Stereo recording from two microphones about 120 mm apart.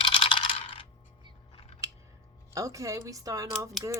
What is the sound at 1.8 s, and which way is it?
Scissors, 25° right (ahead or behind).